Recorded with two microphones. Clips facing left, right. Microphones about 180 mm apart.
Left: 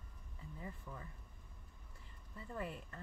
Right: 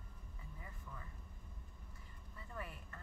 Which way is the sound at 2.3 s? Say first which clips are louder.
Left 5 dB; 25° left (ahead or behind).